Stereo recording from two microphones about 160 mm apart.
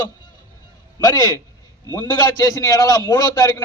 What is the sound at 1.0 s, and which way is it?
A man's voice, 25° left (ahead or behind).